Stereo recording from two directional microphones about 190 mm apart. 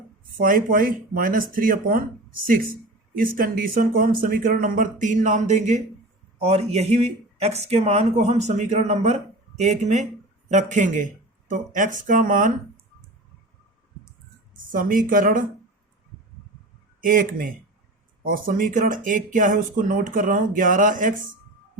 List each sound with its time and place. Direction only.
0.3 s speech: 50° right (ahead or behind)
14.7 s speech: 45° right (ahead or behind)
17.0 s speech: 45° right (ahead or behind)